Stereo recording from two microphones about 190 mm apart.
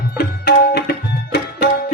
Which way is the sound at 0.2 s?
60° left (ahead or behind).